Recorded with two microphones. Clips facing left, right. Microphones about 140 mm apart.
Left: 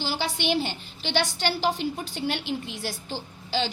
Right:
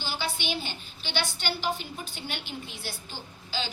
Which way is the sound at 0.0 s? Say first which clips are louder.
Left 5 dB; 90° left.